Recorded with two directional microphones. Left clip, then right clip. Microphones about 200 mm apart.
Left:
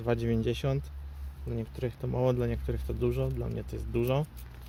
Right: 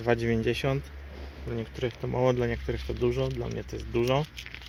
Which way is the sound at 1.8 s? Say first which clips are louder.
Right 4 dB; 5° left (ahead or behind).